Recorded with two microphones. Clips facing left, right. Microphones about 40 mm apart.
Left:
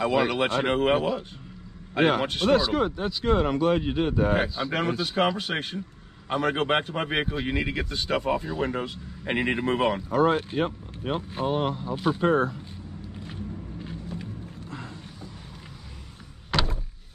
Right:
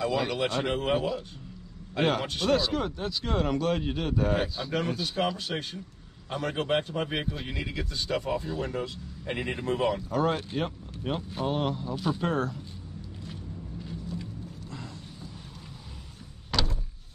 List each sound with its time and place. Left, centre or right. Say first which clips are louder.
0.0 s speech: left 4 dB; left
2.2 s speech: left 4 dB; left
2.5 s speech: left 4 dB; centre
4.9 s speech: left 5 dB; left
10.0 s speech: left 5 dB; centre
11.9 s speech: left 4 dB; left
12.2 s speech: left 6 dB; centre
13.2 s vehicle: left 5 dB; left
16.5 s vehicle: left 3 dB; left